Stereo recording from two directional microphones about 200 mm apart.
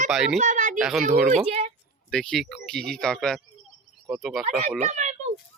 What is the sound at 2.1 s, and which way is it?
Speech, 5° left (ahead or behind).